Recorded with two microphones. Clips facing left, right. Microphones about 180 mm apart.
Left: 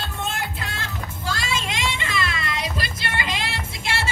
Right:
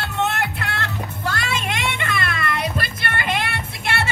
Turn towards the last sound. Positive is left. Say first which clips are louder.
# right 3 dB
turn(degrees=-60)  # may be behind; listen again after turning